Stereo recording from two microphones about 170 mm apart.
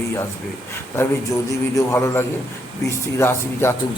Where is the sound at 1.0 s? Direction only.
15° left (ahead or behind).